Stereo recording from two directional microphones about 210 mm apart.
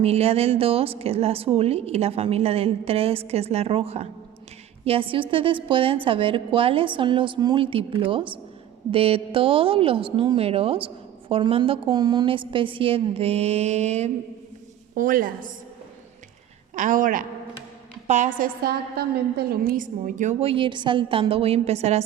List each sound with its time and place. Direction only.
0.0 s a woman's voice: 30° right (ahead or behind)
16.7 s a woman's voice: 40° right (ahead or behind)